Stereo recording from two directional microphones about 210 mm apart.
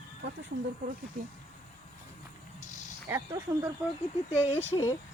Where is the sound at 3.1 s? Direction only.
15° right (ahead or behind).